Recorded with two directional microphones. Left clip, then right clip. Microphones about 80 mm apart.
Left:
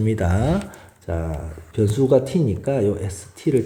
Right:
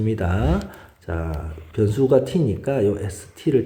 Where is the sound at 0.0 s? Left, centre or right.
Left.